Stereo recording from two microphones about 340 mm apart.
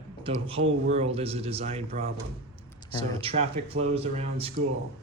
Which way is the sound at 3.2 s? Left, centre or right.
Centre.